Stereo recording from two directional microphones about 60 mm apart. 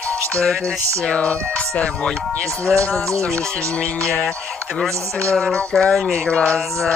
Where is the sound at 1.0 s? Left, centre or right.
Centre.